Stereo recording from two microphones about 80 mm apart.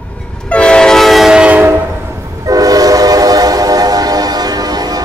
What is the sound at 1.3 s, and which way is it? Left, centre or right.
Train horn, centre.